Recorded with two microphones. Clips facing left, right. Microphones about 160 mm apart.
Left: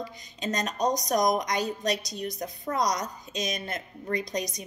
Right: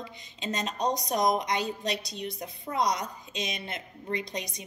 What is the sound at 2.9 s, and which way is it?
A woman's voice, 40° left (ahead or behind).